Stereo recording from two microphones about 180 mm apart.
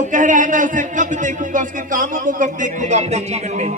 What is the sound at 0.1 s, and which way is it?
A man's voice, 45° right (ahead or behind).